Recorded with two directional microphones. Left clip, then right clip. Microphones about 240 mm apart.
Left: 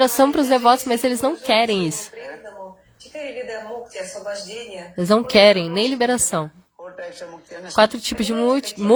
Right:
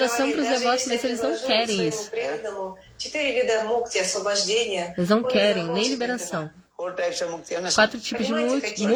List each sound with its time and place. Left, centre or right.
0.0 s speech: left
2.1 s a sound: right
3.2 s speech: right
4.9 s speech: centre
6.8 s speech: right
7.8 s speech: left